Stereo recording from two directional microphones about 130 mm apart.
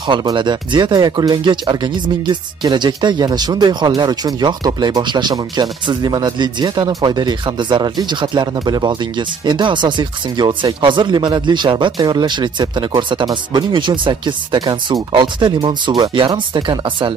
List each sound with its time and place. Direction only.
0.0 s speech: 35° right (ahead or behind)